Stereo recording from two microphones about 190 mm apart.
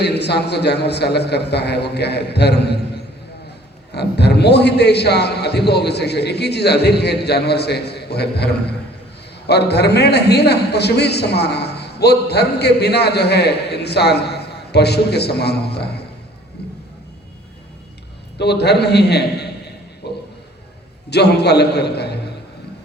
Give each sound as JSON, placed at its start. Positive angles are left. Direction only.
{"t": 0.0, "sound": "a man's voice", "side_deg": 60}
{"t": 3.9, "sound": "a man's voice", "side_deg": 60}
{"t": 18.3, "sound": "a man's voice", "side_deg": 60}
{"t": 20.0, "sound": "a sound", "side_deg": 60}
{"t": 21.1, "sound": "a man's voice", "side_deg": 60}